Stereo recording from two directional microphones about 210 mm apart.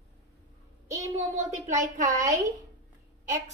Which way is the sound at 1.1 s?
35° right (ahead or behind).